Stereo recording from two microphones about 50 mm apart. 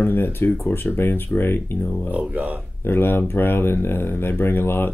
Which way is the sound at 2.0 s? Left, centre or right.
Right.